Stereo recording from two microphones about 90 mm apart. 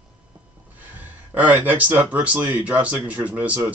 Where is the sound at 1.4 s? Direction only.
20° right (ahead or behind).